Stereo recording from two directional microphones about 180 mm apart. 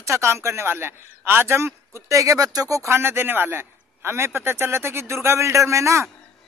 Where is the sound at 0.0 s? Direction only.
15° right (ahead or behind).